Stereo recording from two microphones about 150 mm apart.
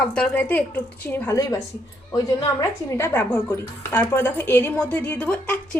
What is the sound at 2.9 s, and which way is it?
A woman's voice, 15° left (ahead or behind).